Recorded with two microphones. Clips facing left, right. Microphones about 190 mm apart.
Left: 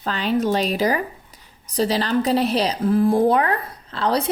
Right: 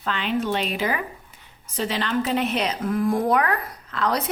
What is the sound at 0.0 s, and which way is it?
Speech, 35° left (ahead or behind).